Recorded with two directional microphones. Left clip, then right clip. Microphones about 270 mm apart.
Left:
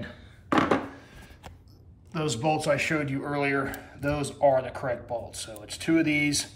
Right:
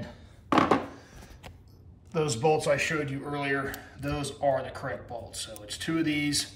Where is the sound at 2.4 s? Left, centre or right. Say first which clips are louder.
Even; centre.